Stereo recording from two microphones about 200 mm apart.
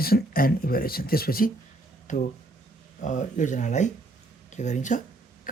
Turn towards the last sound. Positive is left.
turn(degrees=35)  # may be behind; listen again after turning